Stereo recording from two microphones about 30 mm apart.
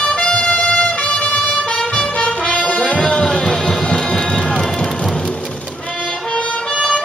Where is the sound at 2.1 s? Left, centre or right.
Left.